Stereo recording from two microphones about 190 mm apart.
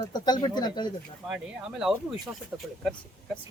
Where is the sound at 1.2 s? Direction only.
5° right (ahead or behind).